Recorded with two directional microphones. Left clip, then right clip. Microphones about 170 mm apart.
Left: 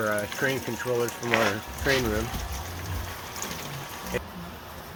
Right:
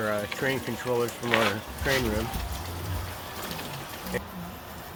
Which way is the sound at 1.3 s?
15° left (ahead or behind).